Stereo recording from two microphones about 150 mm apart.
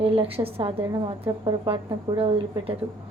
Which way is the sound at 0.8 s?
25° right (ahead or behind).